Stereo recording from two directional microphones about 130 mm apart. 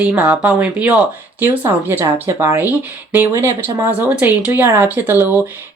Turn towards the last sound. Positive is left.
turn(degrees=-15)  # may be behind; listen again after turning